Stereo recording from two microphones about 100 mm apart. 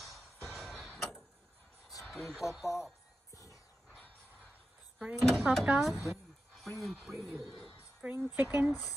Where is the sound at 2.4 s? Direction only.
30° left (ahead or behind).